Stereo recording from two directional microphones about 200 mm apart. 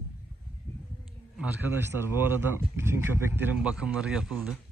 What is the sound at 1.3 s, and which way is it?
Speech, 10° right (ahead or behind).